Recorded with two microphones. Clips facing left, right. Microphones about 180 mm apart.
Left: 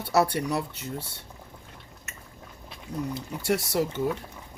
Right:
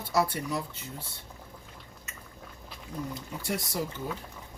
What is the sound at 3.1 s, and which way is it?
Speech, 75° left (ahead or behind).